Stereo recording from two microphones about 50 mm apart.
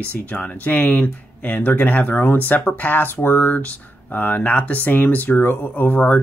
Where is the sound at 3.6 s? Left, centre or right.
Left.